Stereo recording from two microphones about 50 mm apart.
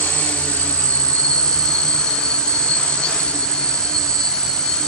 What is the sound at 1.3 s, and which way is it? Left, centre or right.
Train, centre.